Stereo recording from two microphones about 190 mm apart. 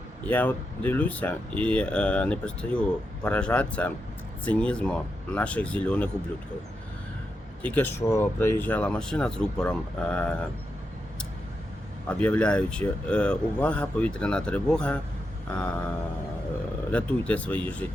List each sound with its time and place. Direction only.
0.3 s speech: 10° left (ahead or behind)
7.6 s speech: 10° left (ahead or behind)
12.0 s speech: 5° left (ahead or behind)
16.9 s speech: 5° left (ahead or behind)